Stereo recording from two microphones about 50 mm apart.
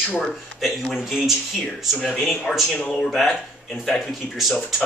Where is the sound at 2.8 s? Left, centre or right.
Centre.